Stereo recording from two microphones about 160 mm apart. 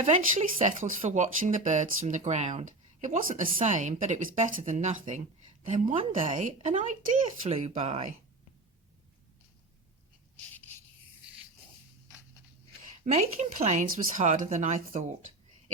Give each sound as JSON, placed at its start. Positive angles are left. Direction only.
{"t": 0.0, "sound": "speech", "side_deg": -50}
{"t": 3.4, "sound": "speech", "side_deg": -35}
{"t": 3.7, "sound": "speech", "side_deg": -50}
{"t": 10.5, "sound": "a sound", "side_deg": 10}
{"t": 13.0, "sound": "speech", "side_deg": -45}